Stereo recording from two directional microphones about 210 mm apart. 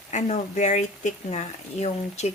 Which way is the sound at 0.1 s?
35° left (ahead or behind).